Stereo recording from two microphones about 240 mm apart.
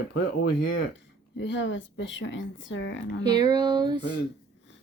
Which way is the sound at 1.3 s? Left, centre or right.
Left.